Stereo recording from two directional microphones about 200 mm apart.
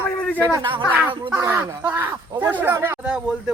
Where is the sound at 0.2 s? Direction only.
5° left (ahead or behind).